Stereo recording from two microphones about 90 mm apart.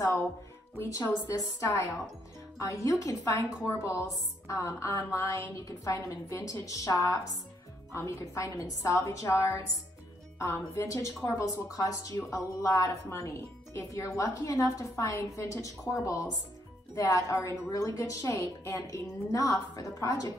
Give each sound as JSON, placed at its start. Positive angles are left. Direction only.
{"t": 0.7, "sound": "a woman's voice", "side_deg": 35}
{"t": 7.9, "sound": "a woman's voice", "side_deg": 35}